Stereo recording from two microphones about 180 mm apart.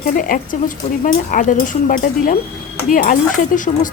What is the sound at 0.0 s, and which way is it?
Speech, 50° left (ahead or behind).